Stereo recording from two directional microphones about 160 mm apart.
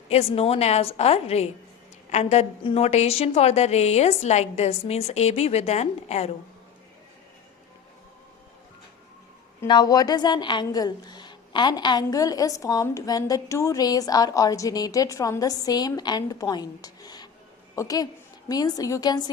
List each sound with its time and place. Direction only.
0.1 s a woman's voice: 40° left (ahead or behind)
9.6 s a woman's voice: 25° left (ahead or behind)